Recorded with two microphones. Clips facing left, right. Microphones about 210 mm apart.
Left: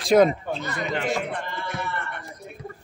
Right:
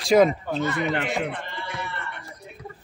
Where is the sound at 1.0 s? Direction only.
45° left (ahead or behind).